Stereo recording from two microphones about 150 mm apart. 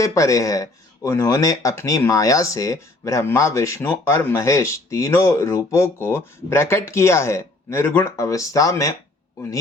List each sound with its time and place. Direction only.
0.0 s speech: 20° left (ahead or behind)